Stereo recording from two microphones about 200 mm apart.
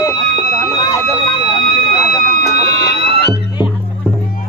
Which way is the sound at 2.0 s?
50° left (ahead or behind).